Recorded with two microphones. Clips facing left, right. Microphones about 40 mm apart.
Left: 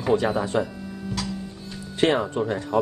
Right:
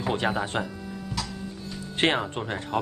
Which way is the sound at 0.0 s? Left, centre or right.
Right.